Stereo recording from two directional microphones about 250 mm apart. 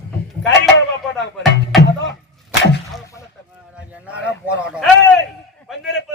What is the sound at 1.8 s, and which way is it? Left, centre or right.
Music, left.